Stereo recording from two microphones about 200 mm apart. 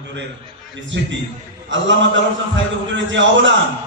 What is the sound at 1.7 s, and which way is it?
A man's voice, 65° right (ahead or behind).